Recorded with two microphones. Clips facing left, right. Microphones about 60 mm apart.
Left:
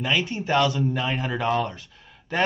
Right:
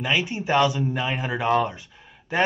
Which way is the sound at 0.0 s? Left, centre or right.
Centre.